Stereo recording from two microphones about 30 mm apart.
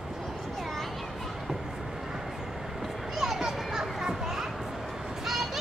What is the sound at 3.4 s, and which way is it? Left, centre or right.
Children playing, centre.